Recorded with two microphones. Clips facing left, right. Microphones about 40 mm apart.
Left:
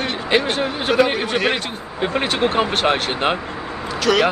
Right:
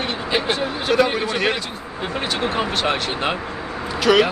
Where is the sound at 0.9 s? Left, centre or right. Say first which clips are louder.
Left 1 dB; centre.